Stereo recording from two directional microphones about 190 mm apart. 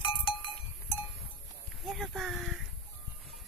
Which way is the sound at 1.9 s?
Centre (ahead or behind).